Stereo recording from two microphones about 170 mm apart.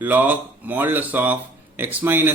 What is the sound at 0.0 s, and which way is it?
Speech, 10° right (ahead or behind).